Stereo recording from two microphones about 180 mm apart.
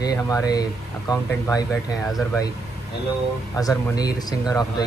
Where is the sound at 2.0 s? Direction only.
Centre (ahead or behind).